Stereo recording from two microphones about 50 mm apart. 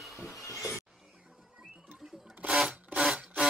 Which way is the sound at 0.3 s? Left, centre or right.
Left.